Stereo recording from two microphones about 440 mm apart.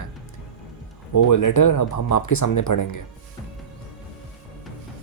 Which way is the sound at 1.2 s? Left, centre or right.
Left.